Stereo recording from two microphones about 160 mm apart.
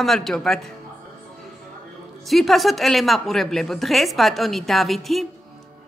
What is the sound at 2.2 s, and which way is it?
A woman's voice, centre (ahead or behind).